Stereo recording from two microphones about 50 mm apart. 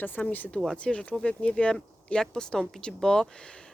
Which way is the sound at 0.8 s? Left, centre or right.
Left.